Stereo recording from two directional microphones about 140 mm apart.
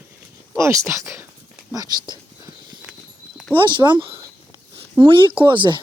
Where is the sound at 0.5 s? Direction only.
20° right (ahead or behind).